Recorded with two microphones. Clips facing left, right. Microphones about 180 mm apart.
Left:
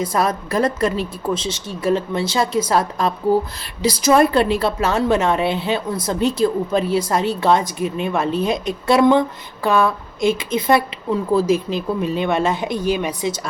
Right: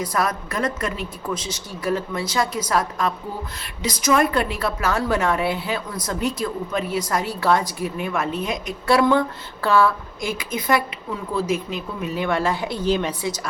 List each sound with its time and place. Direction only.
0.0 s a woman's voice: 25° left (ahead or behind)